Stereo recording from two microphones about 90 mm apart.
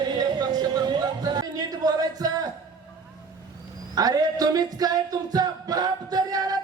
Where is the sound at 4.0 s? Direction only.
45° right (ahead or behind).